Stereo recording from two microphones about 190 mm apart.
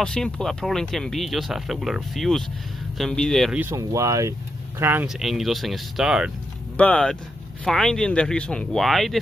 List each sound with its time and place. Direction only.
0.0 s speech: 5° left (ahead or behind)
3.6 s speech: 15° right (ahead or behind); by 9.2 s centre (ahead or behind)